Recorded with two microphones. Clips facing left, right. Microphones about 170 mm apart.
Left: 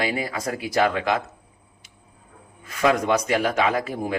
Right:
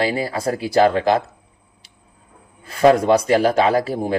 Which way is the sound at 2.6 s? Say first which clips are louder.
Right 7 dB; 30° right (ahead or behind).